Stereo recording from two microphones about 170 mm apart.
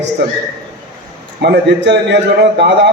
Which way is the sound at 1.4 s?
85° right.